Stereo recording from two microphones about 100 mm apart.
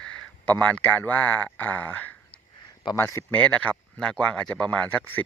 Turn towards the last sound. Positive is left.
turn(degrees=15)  # may be behind; listen again after turning